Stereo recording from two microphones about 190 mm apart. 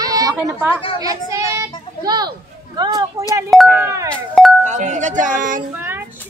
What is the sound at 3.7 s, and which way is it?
Speech, 10° right (ahead or behind).